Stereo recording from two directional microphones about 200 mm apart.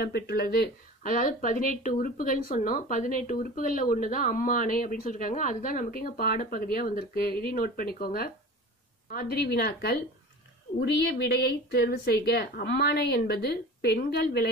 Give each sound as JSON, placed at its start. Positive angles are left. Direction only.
{"t": 0.0, "sound": "speech", "side_deg": 50}